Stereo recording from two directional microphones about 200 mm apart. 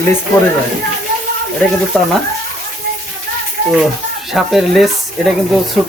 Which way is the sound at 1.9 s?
5° left (ahead or behind).